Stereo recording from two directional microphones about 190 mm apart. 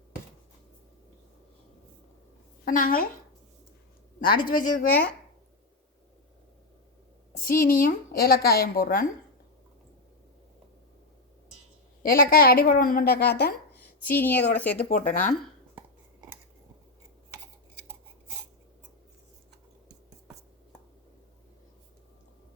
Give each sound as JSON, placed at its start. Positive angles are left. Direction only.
{"t": 2.6, "sound": "a woman's voice", "side_deg": 45}
{"t": 4.3, "sound": "a woman's voice", "side_deg": 50}
{"t": 7.4, "sound": "a woman's voice", "side_deg": 50}
{"t": 12.0, "sound": "a woman's voice", "side_deg": 50}
{"t": 14.1, "sound": "a woman's voice", "side_deg": 10}
{"t": 14.8, "sound": "a woman's voice", "side_deg": 45}